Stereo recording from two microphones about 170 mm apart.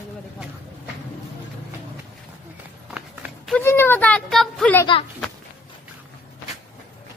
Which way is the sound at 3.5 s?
15° left (ahead or behind).